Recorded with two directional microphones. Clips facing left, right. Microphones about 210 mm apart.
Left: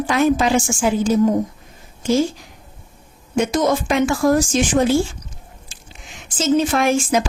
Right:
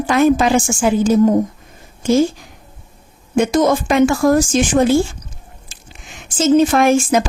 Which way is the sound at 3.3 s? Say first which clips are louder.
Right 4 dB; 50° right (ahead or behind).